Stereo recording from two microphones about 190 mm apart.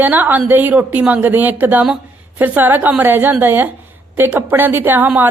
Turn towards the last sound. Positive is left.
turn(degrees=-10)  # may be behind; listen again after turning